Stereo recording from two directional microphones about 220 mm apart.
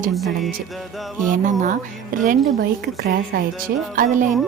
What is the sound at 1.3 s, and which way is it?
A woman's voice, 35° right (ahead or behind).